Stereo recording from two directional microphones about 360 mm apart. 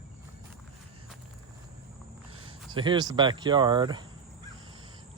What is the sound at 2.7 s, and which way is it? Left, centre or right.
Speech, centre.